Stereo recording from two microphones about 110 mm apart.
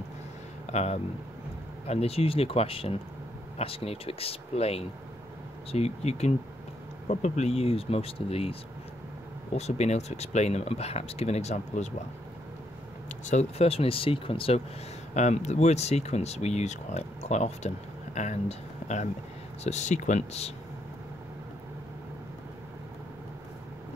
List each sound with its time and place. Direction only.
0.7 s speech: 75° left (ahead or behind)
7.1 s speech: 90° left; by 8.5 s 60° left (ahead or behind)
9.6 s speech: 85° left
13.2 s speech: 90° left; by 14.6 s 55° left (ahead or behind)
15.1 s speech: 90° left